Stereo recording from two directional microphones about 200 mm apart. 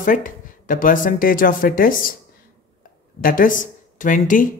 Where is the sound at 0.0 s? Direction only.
40° left (ahead or behind).